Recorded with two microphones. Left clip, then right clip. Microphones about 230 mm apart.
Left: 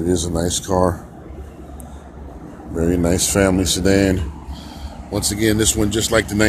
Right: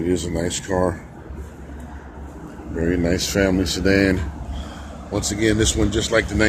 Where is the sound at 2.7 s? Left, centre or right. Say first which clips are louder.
Left 3 dB; centre.